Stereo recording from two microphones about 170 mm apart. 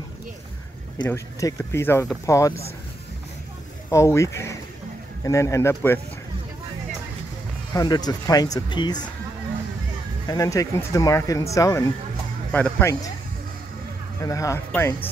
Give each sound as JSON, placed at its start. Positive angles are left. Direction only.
{"t": 1.0, "sound": "speech", "side_deg": 15}
{"t": 3.9, "sound": "speech", "side_deg": 15}
{"t": 7.7, "sound": "speech", "side_deg": 25}
{"t": 10.2, "sound": "speech", "side_deg": 20}
{"t": 12.5, "sound": "speech", "side_deg": 10}
{"t": 14.2, "sound": "speech", "side_deg": 20}